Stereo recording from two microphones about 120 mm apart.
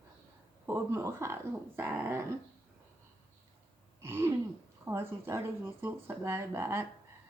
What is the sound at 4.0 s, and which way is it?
A woman's voice, 20° right (ahead or behind).